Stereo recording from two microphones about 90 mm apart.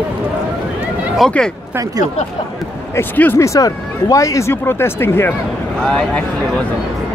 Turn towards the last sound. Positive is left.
turn(degrees=10)  # may be behind; listen again after turning